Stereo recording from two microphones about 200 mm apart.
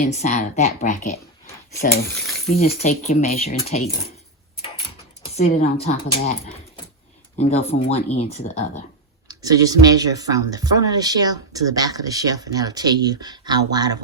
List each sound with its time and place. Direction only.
0.0 s speech: 35° left (ahead or behind)
2.8 s speech: 35° left (ahead or behind)
5.4 s speech: 35° left (ahead or behind)
9.2 s speech: 20° right (ahead or behind)